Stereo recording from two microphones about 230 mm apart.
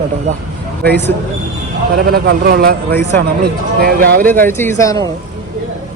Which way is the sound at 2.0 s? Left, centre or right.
Right.